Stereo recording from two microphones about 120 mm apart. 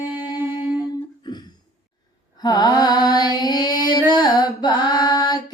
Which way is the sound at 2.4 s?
35° left (ahead or behind).